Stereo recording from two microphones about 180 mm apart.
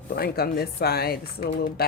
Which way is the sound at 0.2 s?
60° left (ahead or behind).